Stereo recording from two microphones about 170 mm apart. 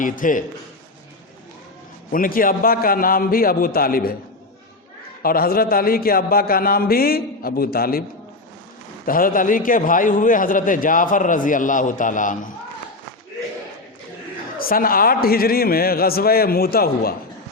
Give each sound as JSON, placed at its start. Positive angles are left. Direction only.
{"t": 0.0, "sound": "a man's voice", "side_deg": 50}
{"t": 2.1, "sound": "a man's voice", "side_deg": 55}
{"t": 5.2, "sound": "a man's voice", "side_deg": 60}
{"t": 9.0, "sound": "a man's voice", "side_deg": 55}
{"t": 14.6, "sound": "a man's voice", "side_deg": 60}